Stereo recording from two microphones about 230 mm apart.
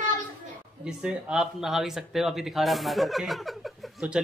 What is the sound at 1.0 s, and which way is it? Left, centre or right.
Speech, centre.